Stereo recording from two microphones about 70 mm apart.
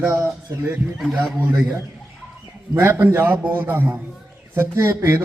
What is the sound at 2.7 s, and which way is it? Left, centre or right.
A man's voice, right.